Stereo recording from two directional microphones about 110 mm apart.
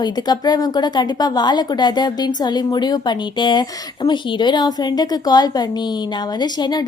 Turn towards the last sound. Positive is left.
turn(degrees=40)  # may be behind; listen again after turning